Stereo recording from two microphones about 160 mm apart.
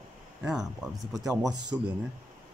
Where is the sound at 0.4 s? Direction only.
5° right (ahead or behind).